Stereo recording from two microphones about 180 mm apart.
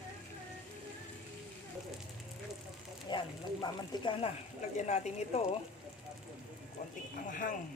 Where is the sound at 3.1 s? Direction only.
25° left (ahead or behind).